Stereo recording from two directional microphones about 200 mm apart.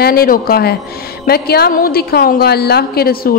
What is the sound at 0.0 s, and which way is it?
A woman's voice, 50° left (ahead or behind).